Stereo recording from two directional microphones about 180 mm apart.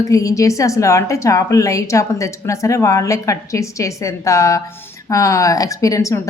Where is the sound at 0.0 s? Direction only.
20° left (ahead or behind).